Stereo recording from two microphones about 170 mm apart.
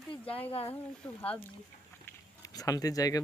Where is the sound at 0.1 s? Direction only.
35° left (ahead or behind).